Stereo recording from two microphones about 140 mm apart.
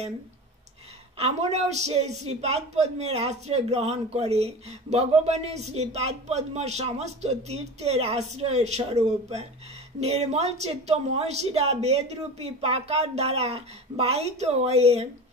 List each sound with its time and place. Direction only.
1.1 s a man's voice: 50° right (ahead or behind)